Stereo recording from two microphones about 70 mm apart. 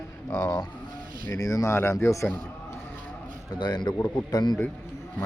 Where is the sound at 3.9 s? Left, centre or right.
Left.